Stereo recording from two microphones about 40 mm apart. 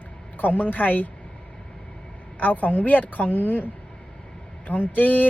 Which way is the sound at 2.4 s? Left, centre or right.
Left.